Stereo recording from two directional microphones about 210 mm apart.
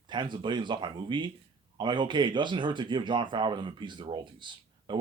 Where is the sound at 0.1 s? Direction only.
20° right (ahead or behind).